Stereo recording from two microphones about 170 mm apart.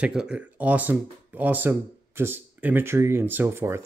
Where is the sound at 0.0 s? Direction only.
5° right (ahead or behind).